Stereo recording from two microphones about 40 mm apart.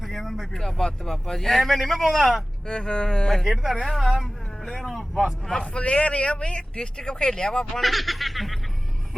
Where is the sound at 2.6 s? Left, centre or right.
Left.